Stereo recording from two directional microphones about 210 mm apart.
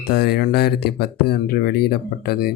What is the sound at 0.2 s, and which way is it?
Speech, 50° left (ahead or behind).